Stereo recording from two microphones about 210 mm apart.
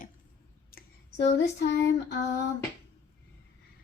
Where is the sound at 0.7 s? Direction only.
45° left (ahead or behind).